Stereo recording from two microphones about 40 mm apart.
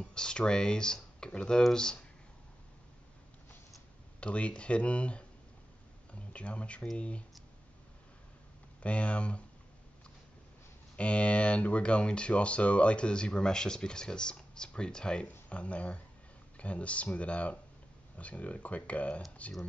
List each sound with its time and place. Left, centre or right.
0.0 s speech: left
4.2 s speech: left
8.8 s speech: left
11.0 s speech: left
15.5 s speech: left